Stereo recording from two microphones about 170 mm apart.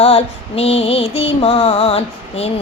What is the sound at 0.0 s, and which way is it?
Music, 35° left (ahead or behind).